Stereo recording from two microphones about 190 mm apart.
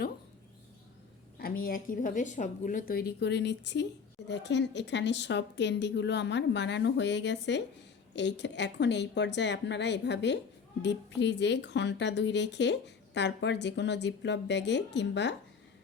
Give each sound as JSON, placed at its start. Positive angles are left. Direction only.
{"t": 1.4, "sound": "a woman's voice", "side_deg": 50}